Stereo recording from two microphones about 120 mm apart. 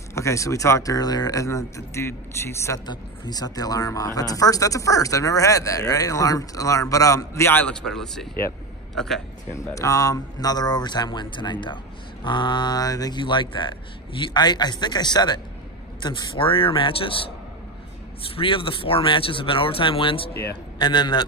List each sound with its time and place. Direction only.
0.1 s speech: 25° left (ahead or behind)
2.9 s speech: 35° left (ahead or behind)
7.6 s a man's voice: 5° left (ahead or behind)
9.5 s speech: 25° left (ahead or behind); by 17.3 s 45° left (ahead or behind)
18.3 s speech: 45° left (ahead or behind)